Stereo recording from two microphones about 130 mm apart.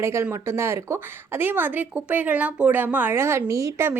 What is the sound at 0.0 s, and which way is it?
Speech, 20° right (ahead or behind).